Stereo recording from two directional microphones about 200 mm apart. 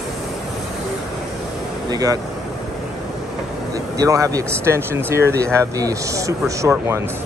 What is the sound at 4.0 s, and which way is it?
Speech, 15° right (ahead or behind).